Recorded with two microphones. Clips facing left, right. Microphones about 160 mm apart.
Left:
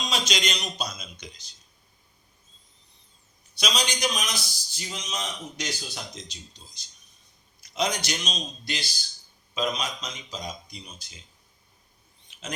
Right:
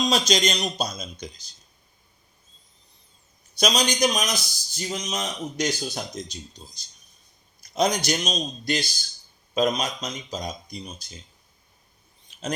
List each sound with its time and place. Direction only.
0.1 s speech: 40° right (ahead or behind)
3.6 s a man's voice: 45° right (ahead or behind)
7.6 s a man's voice: 45° right (ahead or behind)
12.3 s bird: 40° right (ahead or behind)